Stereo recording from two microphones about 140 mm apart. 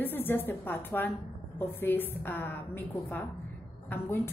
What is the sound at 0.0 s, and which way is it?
A woman's voice, 15° left (ahead or behind).